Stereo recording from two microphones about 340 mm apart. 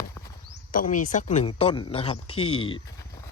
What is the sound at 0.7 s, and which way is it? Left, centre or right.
Speech, left.